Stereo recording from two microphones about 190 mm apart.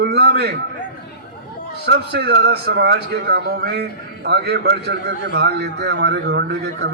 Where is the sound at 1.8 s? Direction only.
60° right (ahead or behind).